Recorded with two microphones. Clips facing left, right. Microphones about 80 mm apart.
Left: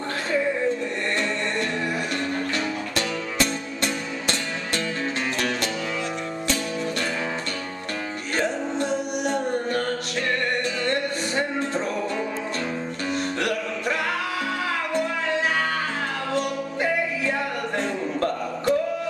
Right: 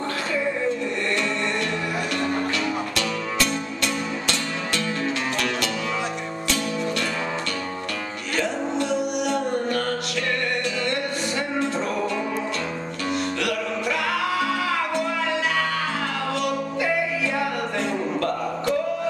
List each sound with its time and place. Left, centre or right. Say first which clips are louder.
3.0 s music: left 3 dB; left
8.4 s music: right 1 dB; left
10.9 s music: left 1 dB; left
13.1 s music: even; left
17.7 s a sound: left 1 dB; left